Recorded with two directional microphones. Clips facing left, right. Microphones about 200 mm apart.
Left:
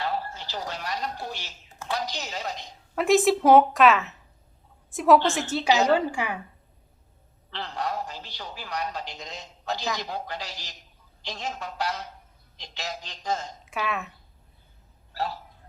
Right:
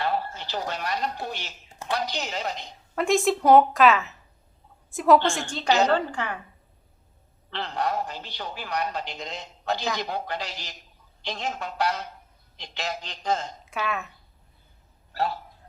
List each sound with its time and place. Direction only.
0.0 s a sound: 60° right (ahead or behind)
2.0 s a woman's voice: 60° right (ahead or behind)
2.9 s a woman's voice: centre (ahead or behind)
7.5 s a woman's voice: 60° right (ahead or behind)
13.7 s a woman's voice: centre (ahead or behind)
15.1 s a man's voice: 60° right (ahead or behind)